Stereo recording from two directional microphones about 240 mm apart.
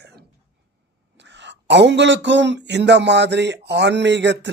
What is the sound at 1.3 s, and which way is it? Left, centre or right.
Speech, right.